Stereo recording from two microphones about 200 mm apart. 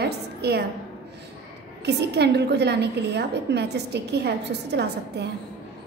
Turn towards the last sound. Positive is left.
turn(degrees=-55)  # may be behind; listen again after turning